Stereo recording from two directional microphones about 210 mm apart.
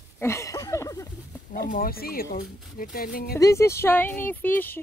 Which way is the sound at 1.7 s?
45° left (ahead or behind).